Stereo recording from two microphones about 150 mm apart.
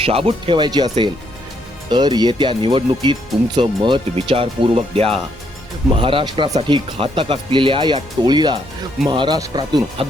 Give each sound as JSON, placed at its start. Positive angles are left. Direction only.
{"t": 0.0, "sound": "speech", "side_deg": -40}